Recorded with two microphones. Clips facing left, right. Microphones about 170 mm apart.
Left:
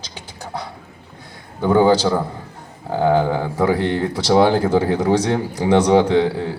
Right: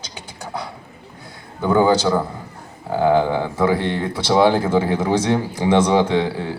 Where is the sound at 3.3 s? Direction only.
35° left (ahead or behind).